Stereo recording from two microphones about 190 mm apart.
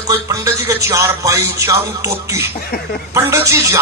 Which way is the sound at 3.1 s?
15° right (ahead or behind).